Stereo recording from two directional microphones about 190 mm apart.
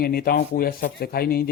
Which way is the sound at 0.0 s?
55° left (ahead or behind).